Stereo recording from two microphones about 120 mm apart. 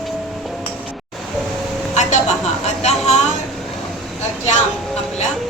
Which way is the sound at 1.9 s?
75° left (ahead or behind).